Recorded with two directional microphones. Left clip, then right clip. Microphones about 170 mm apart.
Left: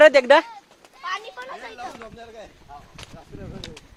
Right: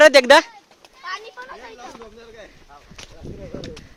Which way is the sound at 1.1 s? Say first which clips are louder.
Left 1 dB; 40° left (ahead or behind).